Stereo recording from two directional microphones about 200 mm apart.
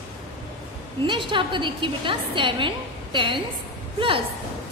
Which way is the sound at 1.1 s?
25° right (ahead or behind).